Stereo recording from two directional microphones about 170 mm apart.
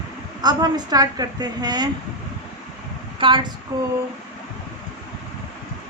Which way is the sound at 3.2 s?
30° right (ahead or behind).